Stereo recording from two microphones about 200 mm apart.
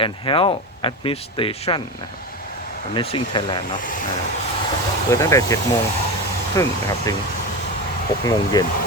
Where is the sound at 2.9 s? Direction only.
25° left (ahead or behind).